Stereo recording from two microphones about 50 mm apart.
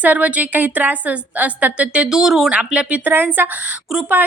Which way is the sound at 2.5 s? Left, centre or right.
Right.